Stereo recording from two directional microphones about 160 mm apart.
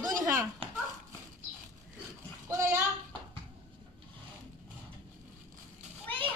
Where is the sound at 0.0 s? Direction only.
20° right (ahead or behind).